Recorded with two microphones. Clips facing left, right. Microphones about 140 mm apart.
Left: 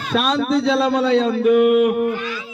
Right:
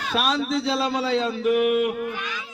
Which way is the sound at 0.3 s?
50° left (ahead or behind).